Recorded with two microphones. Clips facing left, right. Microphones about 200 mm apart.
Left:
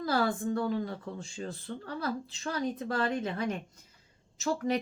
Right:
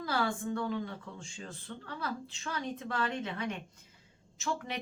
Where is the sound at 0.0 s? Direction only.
40° left (ahead or behind).